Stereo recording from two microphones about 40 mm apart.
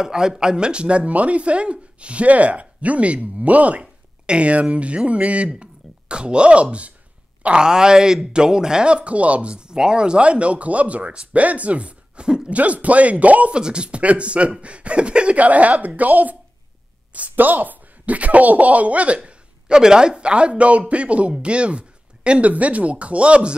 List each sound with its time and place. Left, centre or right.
0.0 s speech: centre
7.4 s speech: right
13.5 s speech: right
19.8 s speech: centre